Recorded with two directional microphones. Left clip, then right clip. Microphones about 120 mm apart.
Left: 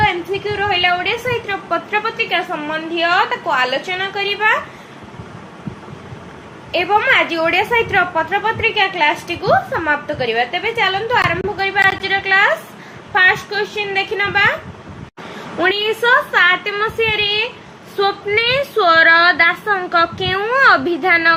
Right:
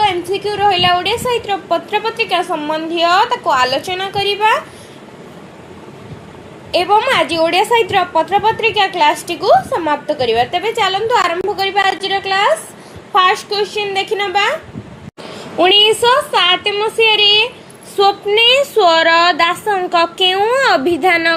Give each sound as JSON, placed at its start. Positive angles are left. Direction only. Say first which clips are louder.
{"t": 0.0, "sound": "a woman's voice", "louder": "right 2 dB", "side_deg": -85}
{"t": 6.7, "sound": "a woman's voice", "louder": "right 2 dB", "side_deg": -70}
{"t": 15.8, "sound": "a woman's voice", "louder": "right 3 dB", "side_deg": -45}
{"t": 17.2, "sound": "speech", "louder": "right 7 dB", "side_deg": -55}
{"t": 18.3, "sound": "a woman's voice", "louder": "right 5 dB", "side_deg": -15}